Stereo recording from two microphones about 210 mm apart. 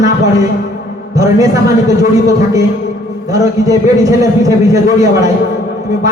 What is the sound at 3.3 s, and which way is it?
A man's voice, 15° right (ahead or behind).